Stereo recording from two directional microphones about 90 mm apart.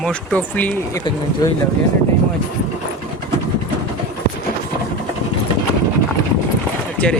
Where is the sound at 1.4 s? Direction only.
40° left (ahead or behind).